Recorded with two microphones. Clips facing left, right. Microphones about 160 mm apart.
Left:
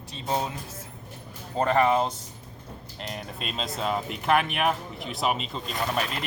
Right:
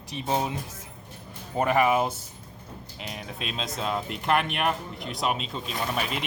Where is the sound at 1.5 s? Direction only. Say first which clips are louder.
Even; 10° right (ahead or behind).